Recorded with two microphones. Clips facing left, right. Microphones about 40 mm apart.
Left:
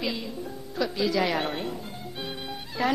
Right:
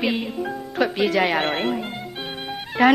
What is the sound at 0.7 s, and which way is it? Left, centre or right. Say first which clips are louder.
A woman's voice: right 6 dB; right.